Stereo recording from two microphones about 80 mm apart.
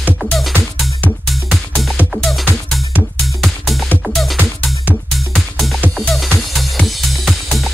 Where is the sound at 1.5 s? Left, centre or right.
Centre.